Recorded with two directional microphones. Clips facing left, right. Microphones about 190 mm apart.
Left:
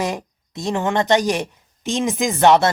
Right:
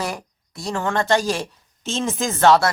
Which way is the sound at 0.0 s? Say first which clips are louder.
Left 4 dB; 20° left (ahead or behind).